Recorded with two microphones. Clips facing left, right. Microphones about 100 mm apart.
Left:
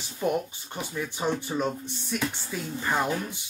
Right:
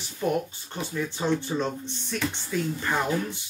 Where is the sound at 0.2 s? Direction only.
20° left (ahead or behind).